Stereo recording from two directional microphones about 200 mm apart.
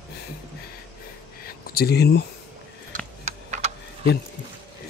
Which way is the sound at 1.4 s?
50° left (ahead or behind).